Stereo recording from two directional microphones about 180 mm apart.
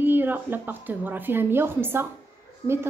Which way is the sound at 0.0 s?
10° right (ahead or behind).